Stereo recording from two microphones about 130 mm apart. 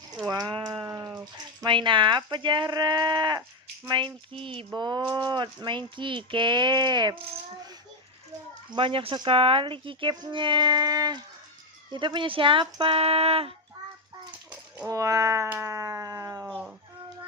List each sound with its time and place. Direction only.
0.3 s a sound: 35° right (ahead or behind)
0.9 s speech: 25° right (ahead or behind)
8.7 s speech: 40° right (ahead or behind)
14.8 s cat: 25° right (ahead or behind)